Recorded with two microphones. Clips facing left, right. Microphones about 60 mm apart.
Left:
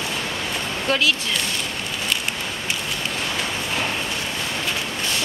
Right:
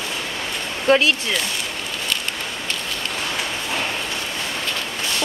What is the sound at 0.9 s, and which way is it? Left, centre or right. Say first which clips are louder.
Speech: right 5 dB; right.